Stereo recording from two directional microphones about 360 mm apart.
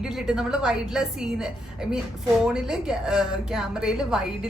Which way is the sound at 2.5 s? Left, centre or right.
Centre.